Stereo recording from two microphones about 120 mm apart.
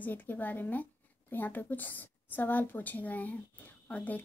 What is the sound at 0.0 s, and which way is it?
Speech, 15° left (ahead or behind).